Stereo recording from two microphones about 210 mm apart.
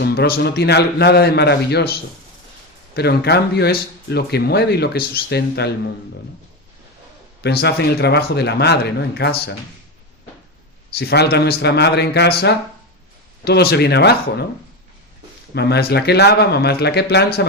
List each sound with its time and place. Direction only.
0.0 s speech: 50° left (ahead or behind)
7.4 s speech: 50° left (ahead or behind)
10.9 s speech: 50° left (ahead or behind)
15.5 s speech: 50° left (ahead or behind)